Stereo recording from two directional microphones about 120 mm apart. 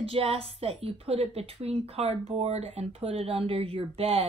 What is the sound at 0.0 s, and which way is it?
A woman's voice, 55° right (ahead or behind).